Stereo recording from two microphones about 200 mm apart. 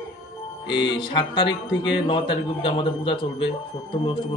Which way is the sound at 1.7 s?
60° left (ahead or behind).